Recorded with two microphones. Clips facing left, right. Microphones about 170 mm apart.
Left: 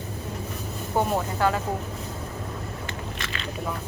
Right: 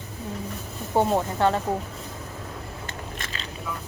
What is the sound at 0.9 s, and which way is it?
Speech, 25° right (ahead or behind).